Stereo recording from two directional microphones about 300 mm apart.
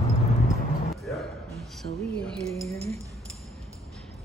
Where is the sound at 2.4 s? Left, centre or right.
Centre.